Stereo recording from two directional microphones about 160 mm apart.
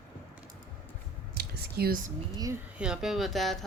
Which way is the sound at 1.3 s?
75° right (ahead or behind).